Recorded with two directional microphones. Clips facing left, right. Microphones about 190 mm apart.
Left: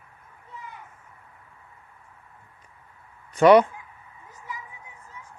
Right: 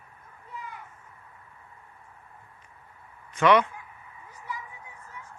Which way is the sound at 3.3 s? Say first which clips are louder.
Left 6 dB; 35° left (ahead or behind).